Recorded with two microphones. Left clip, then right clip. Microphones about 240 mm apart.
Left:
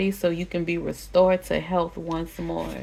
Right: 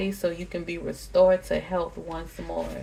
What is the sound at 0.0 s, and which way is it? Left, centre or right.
Speech, left.